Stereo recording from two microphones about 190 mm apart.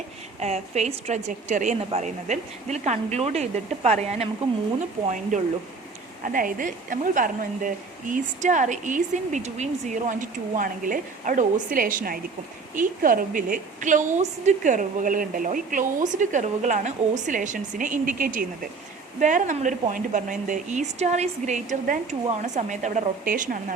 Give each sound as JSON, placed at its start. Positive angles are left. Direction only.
{"t": 0.3, "sound": "a woman's voice", "side_deg": -35}
{"t": 5.3, "sound": "a woman's voice", "side_deg": -40}